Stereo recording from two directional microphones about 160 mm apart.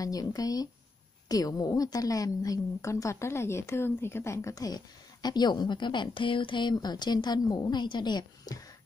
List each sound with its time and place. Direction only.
0.0 s a woman's voice: 20° left (ahead or behind)